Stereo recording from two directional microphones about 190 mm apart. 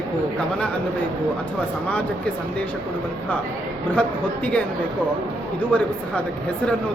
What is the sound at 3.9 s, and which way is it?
Speech, 10° left (ahead or behind).